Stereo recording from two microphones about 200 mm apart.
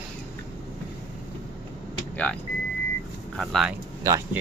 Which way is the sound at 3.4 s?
Centre (ahead or behind).